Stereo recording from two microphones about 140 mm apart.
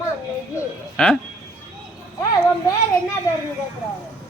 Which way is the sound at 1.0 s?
5° left (ahead or behind).